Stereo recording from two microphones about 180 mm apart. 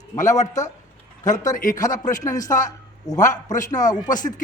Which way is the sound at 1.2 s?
45° left (ahead or behind).